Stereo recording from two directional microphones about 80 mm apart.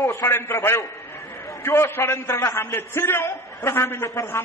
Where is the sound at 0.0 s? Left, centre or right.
Left.